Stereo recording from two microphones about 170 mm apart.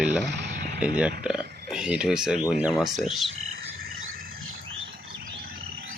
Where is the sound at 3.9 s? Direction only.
60° right (ahead or behind).